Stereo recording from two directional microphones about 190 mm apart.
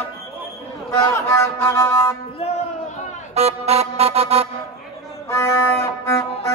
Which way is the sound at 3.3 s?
35° right (ahead or behind).